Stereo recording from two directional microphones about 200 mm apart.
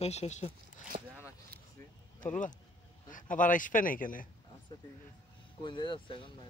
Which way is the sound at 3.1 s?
40° left (ahead or behind).